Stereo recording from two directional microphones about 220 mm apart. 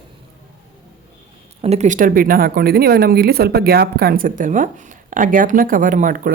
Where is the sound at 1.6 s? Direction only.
30° right (ahead or behind).